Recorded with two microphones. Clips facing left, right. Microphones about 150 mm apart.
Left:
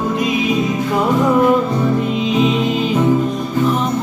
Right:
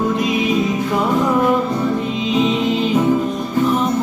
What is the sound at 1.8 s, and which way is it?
Music, 5° left (ahead or behind).